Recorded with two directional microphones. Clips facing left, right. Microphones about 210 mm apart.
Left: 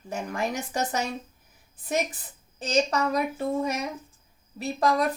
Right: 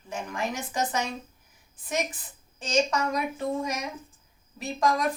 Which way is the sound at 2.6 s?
35° left (ahead or behind).